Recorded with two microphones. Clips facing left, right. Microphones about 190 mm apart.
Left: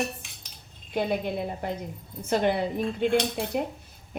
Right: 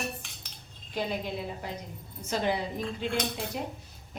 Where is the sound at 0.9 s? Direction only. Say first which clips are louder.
Left 5 dB; 55° left (ahead or behind).